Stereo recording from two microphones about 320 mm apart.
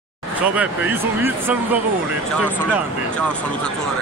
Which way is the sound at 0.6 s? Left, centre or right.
Centre.